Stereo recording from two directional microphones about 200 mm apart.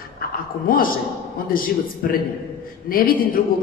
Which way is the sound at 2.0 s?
45° left (ahead or behind).